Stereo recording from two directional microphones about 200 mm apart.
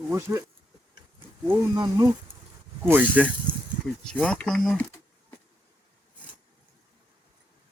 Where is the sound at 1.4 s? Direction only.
15° right (ahead or behind).